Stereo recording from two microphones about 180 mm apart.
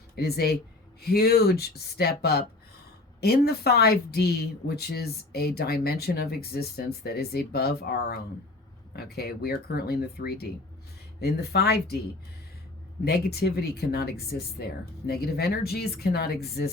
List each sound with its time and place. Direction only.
0.2 s a woman's voice: 60° left (ahead or behind)
13.1 s a woman's voice: 60° left (ahead or behind)